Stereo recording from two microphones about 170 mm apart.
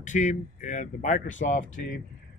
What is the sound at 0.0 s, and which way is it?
Speech, 45° left (ahead or behind).